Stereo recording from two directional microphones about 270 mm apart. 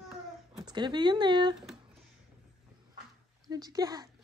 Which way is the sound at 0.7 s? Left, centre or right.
Centre.